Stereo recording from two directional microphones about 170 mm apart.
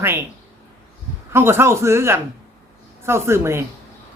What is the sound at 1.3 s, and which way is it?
Speech, 15° right (ahead or behind).